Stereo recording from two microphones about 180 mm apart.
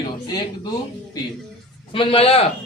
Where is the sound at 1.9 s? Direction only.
30° left (ahead or behind).